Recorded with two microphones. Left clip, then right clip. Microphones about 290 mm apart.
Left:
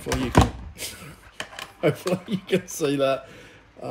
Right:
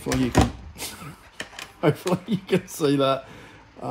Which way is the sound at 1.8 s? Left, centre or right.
Centre.